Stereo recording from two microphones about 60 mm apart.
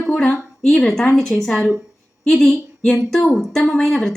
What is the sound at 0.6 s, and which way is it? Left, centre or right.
A woman's voice, centre.